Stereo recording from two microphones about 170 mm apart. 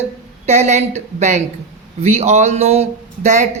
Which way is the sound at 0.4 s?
40° right (ahead or behind).